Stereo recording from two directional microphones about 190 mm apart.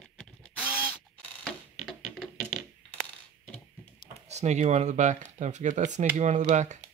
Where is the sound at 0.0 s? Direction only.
5° left (ahead or behind).